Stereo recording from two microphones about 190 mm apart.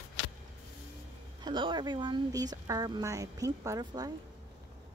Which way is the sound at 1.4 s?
25° right (ahead or behind).